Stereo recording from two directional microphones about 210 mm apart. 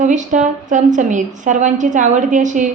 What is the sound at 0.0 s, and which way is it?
A woman's voice, 35° right (ahead or behind).